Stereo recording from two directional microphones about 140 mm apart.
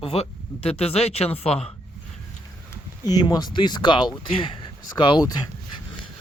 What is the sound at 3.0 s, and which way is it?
Speech, 30° left (ahead or behind).